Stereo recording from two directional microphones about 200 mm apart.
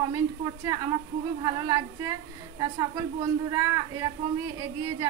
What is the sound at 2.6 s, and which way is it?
A woman's voice, 20° right (ahead or behind).